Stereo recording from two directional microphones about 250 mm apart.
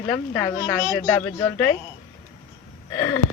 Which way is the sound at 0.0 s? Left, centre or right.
Centre.